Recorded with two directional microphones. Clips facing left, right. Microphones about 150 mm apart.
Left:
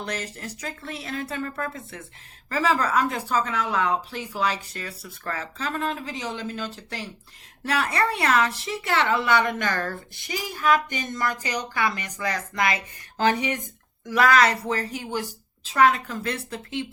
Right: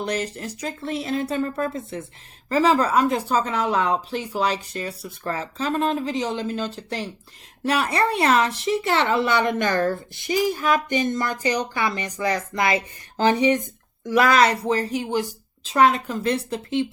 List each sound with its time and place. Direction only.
0.0 s a woman's voice: 20° right (ahead or behind)